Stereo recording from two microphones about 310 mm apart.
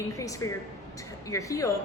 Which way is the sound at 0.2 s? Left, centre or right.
Centre.